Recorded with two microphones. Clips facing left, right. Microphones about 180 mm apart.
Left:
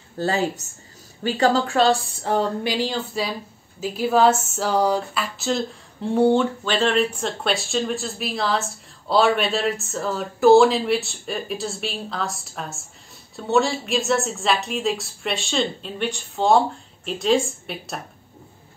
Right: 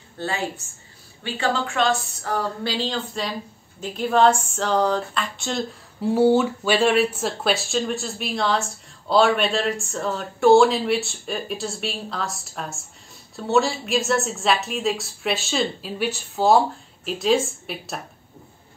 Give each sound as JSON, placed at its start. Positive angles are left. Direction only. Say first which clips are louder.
{"t": 0.2, "sound": "speech", "louder": "left 5 dB", "side_deg": 40}
{"t": 2.6, "sound": "speech", "louder": "left 2 dB", "side_deg": 15}
{"t": 3.8, "sound": "a sound", "louder": "even", "side_deg": 5}